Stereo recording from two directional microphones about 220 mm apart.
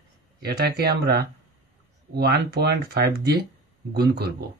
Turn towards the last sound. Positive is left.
turn(degrees=-45)  # may be behind; listen again after turning